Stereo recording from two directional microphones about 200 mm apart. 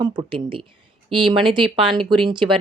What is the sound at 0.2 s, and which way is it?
A woman's voice, 25° right (ahead or behind).